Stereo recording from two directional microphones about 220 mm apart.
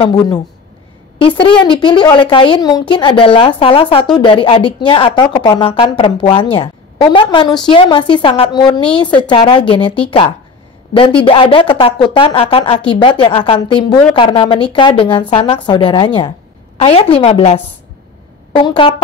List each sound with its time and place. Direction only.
0.0 s speech: 20° left (ahead or behind)
10.9 s speech: 25° left (ahead or behind)